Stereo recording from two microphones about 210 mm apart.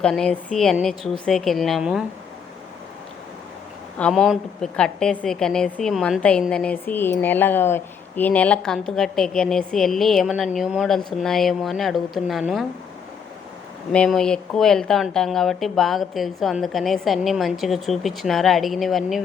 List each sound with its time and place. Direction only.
0.0 s a woman's voice: 5° left (ahead or behind)
3.9 s a woman's voice: 5° left (ahead or behind)
13.9 s a woman's voice: 5° left (ahead or behind)